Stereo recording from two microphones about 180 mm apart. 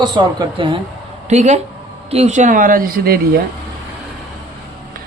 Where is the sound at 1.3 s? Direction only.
40° right (ahead or behind); by 3.4 s 55° right (ahead or behind).